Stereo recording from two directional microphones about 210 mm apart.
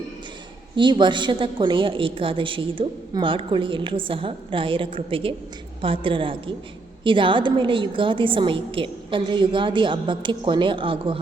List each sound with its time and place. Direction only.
0.8 s a woman's voice: 20° right (ahead or behind)